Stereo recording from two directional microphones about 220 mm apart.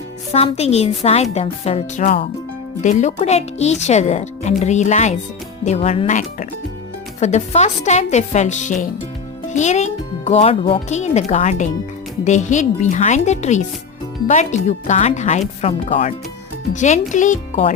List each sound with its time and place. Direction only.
0.3 s a woman's voice: 30° left (ahead or behind)